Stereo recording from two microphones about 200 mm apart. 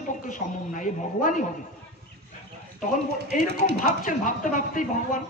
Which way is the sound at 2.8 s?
40° left (ahead or behind).